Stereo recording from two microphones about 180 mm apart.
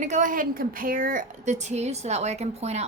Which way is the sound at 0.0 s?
45° right (ahead or behind).